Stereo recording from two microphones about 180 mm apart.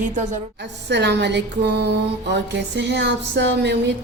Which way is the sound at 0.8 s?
70° right (ahead or behind).